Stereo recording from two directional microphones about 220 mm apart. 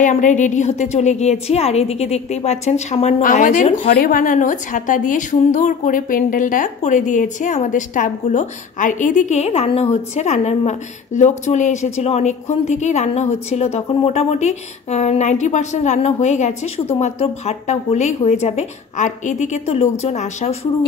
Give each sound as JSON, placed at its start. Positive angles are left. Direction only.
{"t": 0.0, "sound": "a woman's voice", "side_deg": 35}